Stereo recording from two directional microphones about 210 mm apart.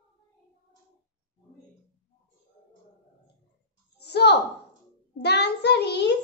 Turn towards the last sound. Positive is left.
turn(degrees=55)  # may be behind; listen again after turning